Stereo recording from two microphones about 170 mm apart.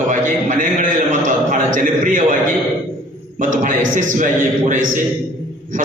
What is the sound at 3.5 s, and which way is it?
A man's voice, 50° right (ahead or behind).